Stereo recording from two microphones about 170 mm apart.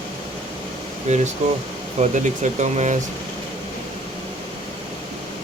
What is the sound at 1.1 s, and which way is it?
Speech, 45° right (ahead or behind).